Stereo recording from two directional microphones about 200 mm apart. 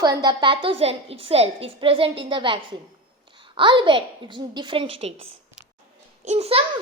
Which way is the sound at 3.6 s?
25° right (ahead or behind).